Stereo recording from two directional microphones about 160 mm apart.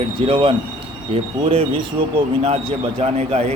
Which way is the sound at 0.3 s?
35° right (ahead or behind).